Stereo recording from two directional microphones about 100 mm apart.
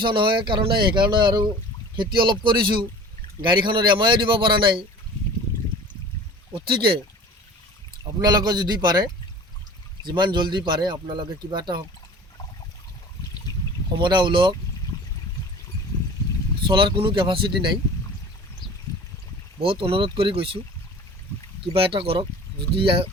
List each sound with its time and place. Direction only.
0.0 s speech: 55° right (ahead or behind)
6.5 s speech: 55° right (ahead or behind)
8.2 s speech: 45° right (ahead or behind)
14.0 s speech: 50° right (ahead or behind)
16.6 s speech: 55° right (ahead or behind)
19.6 s speech: 65° right (ahead or behind)
21.6 s speech: 65° right (ahead or behind)